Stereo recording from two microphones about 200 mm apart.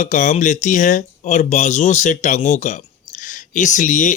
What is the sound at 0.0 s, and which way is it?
Speech, 40° left (ahead or behind).